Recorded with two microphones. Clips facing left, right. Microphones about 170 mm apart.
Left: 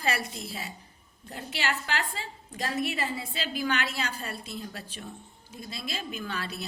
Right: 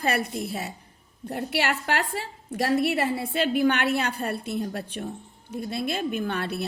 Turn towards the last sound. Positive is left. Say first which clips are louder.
# right 7 dB
turn(degrees=-60)  # may be behind; listen again after turning